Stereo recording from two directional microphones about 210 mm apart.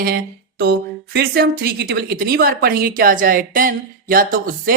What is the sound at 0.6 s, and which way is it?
A woman's voice, 50° right (ahead or behind).